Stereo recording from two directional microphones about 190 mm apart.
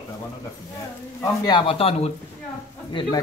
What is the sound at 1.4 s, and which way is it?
Speech, 25° left (ahead or behind).